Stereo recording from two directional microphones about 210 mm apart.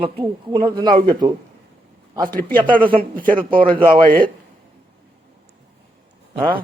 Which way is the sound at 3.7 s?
25° right (ahead or behind).